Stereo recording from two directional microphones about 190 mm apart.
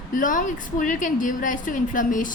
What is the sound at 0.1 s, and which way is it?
A woman's voice, 45° left (ahead or behind).